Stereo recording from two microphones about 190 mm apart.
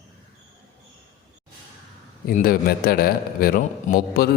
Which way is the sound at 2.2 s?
50° left (ahead or behind).